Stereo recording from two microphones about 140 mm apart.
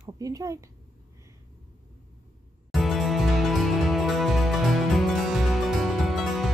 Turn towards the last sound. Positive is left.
turn(degrees=0)  # may be behind; listen again after turning